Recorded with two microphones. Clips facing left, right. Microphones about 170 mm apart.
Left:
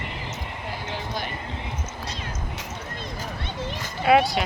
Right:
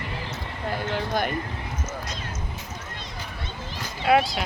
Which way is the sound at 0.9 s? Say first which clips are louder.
Right 6 dB; 50° right (ahead or behind).